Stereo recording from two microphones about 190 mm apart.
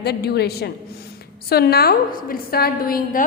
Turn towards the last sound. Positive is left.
turn(degrees=50)  # may be behind; listen again after turning